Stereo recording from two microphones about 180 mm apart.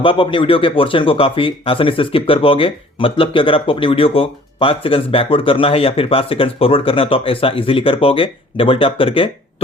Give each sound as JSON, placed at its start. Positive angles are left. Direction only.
{"t": 0.0, "sound": "speech", "side_deg": 30}